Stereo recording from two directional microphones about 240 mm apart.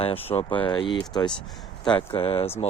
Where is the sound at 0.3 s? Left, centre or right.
Left.